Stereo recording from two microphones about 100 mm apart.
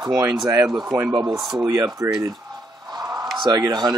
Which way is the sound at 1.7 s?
35° right (ahead or behind).